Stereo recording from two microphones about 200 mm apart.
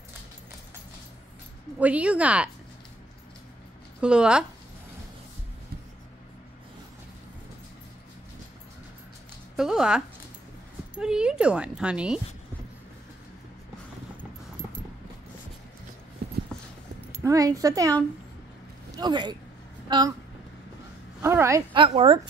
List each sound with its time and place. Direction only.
1.8 s speech: 5° right (ahead or behind)
4.0 s speech: 5° right (ahead or behind)
9.6 s speech: 5° right (ahead or behind)
17.2 s speech: 15° right (ahead or behind)
18.9 s a woman's voice: 20° right (ahead or behind)
21.2 s a woman's voice: 15° right (ahead or behind)
21.7 s a woman's voice: 25° right (ahead or behind)